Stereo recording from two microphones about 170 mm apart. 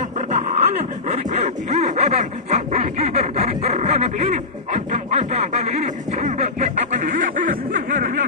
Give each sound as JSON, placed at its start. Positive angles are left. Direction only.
{"t": 0.3, "sound": "dog", "side_deg": -40}